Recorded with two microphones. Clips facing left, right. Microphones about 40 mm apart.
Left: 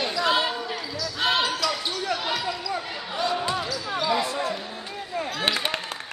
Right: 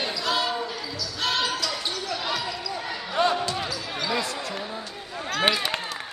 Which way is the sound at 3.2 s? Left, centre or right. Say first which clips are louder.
Right 4 dB; right.